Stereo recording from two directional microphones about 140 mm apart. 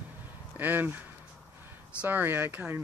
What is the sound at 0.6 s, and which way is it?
Speech, 15° right (ahead or behind).